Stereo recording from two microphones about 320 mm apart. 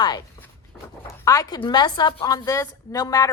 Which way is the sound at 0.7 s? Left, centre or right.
Centre.